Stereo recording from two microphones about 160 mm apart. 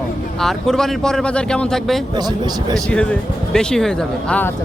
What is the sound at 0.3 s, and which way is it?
Speech, 5° left (ahead or behind).